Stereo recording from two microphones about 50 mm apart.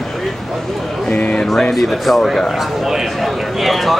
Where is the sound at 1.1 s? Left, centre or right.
Left.